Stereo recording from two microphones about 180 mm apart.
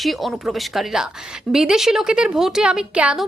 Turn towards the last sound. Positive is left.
turn(degrees=-5)  # may be behind; listen again after turning